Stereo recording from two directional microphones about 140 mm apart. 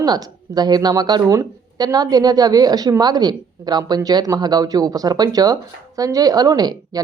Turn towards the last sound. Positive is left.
turn(degrees=-30)  # may be behind; listen again after turning